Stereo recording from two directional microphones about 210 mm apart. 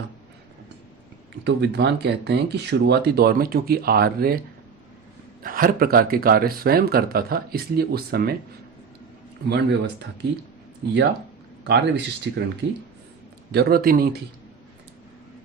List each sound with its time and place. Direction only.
1.5 s speech: 55° right (ahead or behind)
5.4 s speech: 40° right (ahead or behind)
9.5 s speech: 55° right (ahead or behind)
11.6 s speech: 55° right (ahead or behind)
13.5 s speech: 50° right (ahead or behind)